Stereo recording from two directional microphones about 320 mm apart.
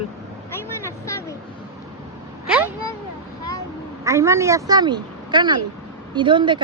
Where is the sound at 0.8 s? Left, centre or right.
Centre.